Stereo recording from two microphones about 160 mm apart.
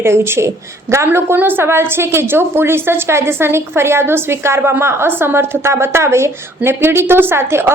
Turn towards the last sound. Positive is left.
turn(degrees=-15)  # may be behind; listen again after turning